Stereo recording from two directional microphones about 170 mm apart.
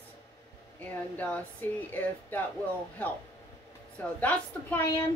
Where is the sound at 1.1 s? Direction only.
10° left (ahead or behind).